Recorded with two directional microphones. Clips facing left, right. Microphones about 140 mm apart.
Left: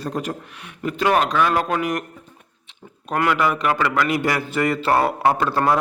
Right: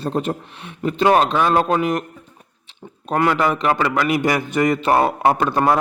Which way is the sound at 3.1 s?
30° right (ahead or behind).